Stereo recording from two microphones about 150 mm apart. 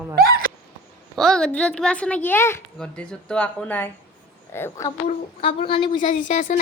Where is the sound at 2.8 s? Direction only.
5° left (ahead or behind).